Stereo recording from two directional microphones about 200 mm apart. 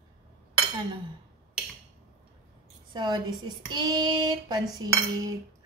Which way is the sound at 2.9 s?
20° right (ahead or behind).